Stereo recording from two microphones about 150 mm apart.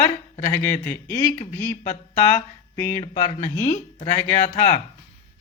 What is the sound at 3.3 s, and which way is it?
Speech, 55° left (ahead or behind).